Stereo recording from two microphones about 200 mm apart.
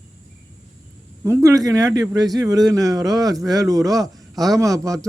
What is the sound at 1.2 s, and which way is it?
Speech, 15° right (ahead or behind).